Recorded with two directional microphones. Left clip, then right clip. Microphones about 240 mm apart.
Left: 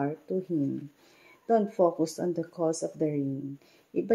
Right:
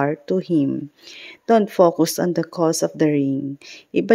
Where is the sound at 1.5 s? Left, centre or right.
Right.